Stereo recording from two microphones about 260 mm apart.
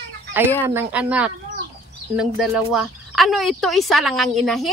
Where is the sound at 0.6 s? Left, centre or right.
Centre.